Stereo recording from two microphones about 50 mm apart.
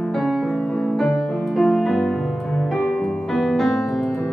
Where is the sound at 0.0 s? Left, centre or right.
Centre.